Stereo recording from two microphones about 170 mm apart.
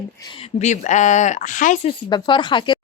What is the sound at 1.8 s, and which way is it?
Speech, 30° left (ahead or behind).